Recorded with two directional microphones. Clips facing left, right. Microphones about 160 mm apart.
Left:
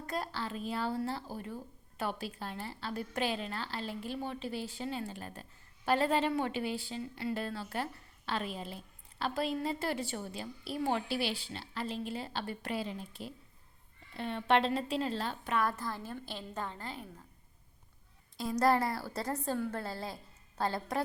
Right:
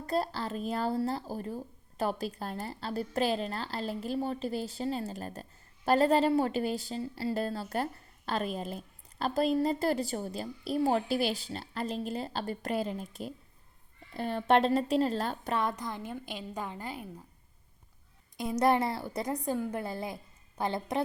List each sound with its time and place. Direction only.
0.0 s speech: 35° right (ahead or behind)
15.5 s a woman's voice: 20° right (ahead or behind)
18.6 s a woman's voice: 20° right (ahead or behind)